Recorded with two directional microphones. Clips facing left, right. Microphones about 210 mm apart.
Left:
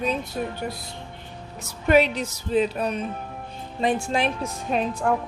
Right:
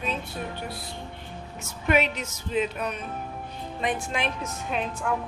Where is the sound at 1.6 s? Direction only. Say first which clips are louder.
Left 5 dB; 35° left (ahead or behind).